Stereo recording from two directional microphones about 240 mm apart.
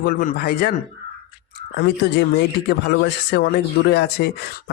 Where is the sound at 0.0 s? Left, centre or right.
Left.